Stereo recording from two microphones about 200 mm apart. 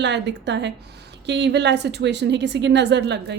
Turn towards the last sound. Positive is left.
turn(degrees=-55)  # may be behind; listen again after turning